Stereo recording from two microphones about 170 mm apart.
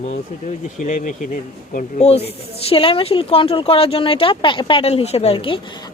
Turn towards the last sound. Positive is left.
turn(degrees=35)  # may be behind; listen again after turning